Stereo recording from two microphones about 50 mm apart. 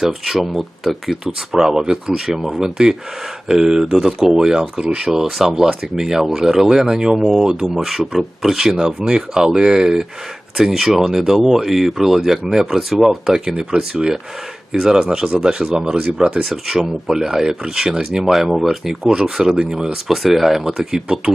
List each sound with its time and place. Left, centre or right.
0.0 s speech: centre
16.5 s speech: centre
19.0 s speech: centre